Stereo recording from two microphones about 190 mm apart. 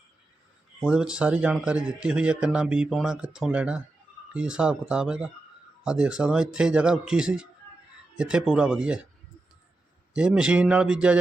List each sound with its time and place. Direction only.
0.9 s speech: 5° right (ahead or behind)
10.2 s speech: 5° right (ahead or behind)